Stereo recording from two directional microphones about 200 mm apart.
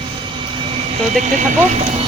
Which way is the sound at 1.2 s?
35° right (ahead or behind).